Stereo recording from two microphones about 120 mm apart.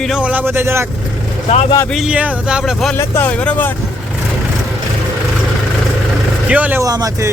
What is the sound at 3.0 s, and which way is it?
Speech, 15° left (ahead or behind).